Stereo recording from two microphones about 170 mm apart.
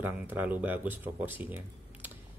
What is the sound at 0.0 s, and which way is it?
Speech, 10° right (ahead or behind).